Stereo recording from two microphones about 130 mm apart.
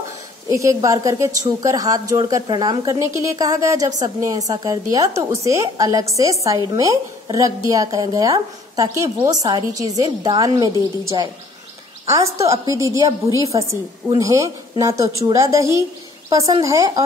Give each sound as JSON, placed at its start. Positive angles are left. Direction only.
{"t": 0.5, "sound": "a woman's voice", "side_deg": -25}
{"t": 12.1, "sound": "a woman's voice", "side_deg": -25}